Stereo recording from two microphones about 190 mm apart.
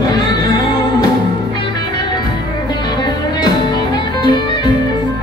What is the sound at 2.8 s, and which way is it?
Music, 20° left (ahead or behind).